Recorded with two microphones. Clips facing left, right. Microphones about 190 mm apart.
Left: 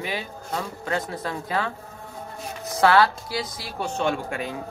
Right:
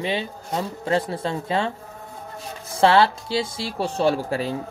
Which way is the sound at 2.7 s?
30° right (ahead or behind).